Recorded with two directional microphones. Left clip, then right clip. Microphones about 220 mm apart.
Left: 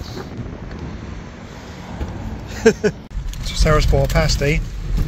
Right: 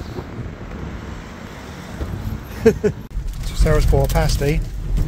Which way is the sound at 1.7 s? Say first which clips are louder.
Even; 60° right (ahead or behind).